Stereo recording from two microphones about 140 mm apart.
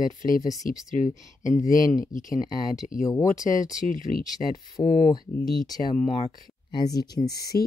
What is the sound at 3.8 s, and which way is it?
Speech, 70° left (ahead or behind).